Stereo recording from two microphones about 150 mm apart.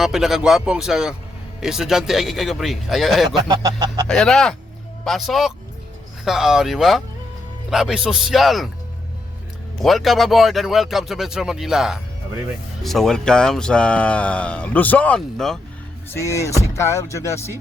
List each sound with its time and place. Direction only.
0.0 s speech: centre (ahead or behind)
3.3 s speech: 25° right (ahead or behind)
4.0 s speech: 5° left (ahead or behind)
9.8 s speech: centre (ahead or behind)
16.0 s speech: 20° left (ahead or behind)